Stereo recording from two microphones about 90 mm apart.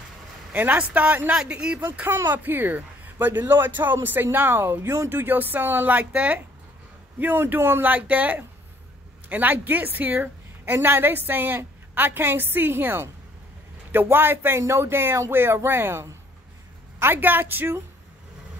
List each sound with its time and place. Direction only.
0.5 s speech: 20° right (ahead or behind)
2.0 s speech: 25° right (ahead or behind)